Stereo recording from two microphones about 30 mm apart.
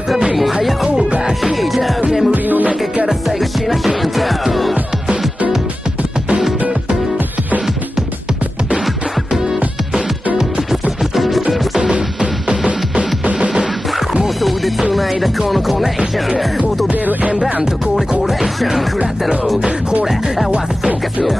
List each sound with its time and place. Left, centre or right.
0.3 s music: centre
2.3 s music: right
3.1 s music: centre
9.3 s music: right
11.1 s music: centre
11.9 s music: right
14.8 s music: centre
16.9 s music: right
18.2 s music: centre
20.1 s music: centre